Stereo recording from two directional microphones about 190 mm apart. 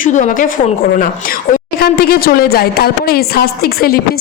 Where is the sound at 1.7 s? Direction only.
50° left (ahead or behind).